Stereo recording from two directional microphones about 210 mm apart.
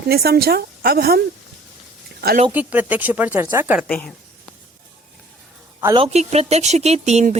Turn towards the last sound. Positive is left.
turn(degrees=-35)  # may be behind; listen again after turning